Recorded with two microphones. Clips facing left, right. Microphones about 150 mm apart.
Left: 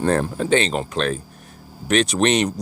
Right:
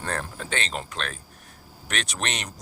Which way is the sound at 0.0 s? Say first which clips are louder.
Left 12 dB; 25° left (ahead or behind).